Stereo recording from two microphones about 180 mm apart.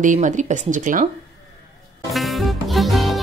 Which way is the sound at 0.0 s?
45° right (ahead or behind).